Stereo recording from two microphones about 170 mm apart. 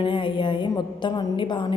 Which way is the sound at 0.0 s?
30° left (ahead or behind).